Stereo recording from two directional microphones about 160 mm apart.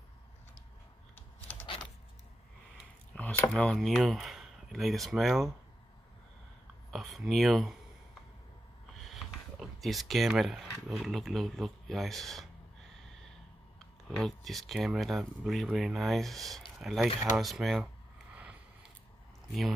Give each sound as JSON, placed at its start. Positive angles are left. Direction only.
{"t": 3.1, "sound": "speech", "side_deg": 5}
{"t": 6.9, "sound": "speech", "side_deg": 0}
{"t": 8.9, "sound": "a sound", "side_deg": 0}
{"t": 10.9, "sound": "speech", "side_deg": 0}
{"t": 13.7, "sound": "speech", "side_deg": 0}
{"t": 18.3, "sound": "a sound", "side_deg": -10}